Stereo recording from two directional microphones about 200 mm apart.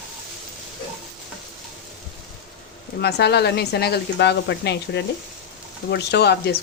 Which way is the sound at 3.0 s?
55° left (ahead or behind).